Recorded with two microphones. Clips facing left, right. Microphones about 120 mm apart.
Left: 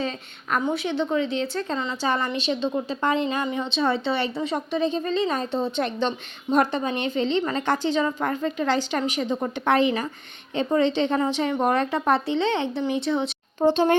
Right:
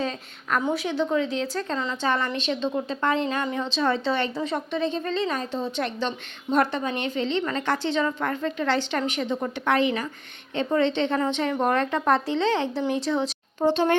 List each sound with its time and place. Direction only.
0.0 s a woman's voice: centre (ahead or behind)
9.4 s a woman's voice: 25° left (ahead or behind); by 13.3 s centre (ahead or behind)
13.6 s a woman's voice: 20° left (ahead or behind)